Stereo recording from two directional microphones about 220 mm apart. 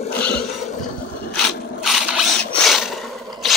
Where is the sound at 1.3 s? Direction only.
Centre (ahead or behind).